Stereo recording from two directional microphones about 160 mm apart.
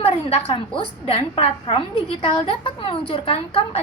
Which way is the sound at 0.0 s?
40° left (ahead or behind).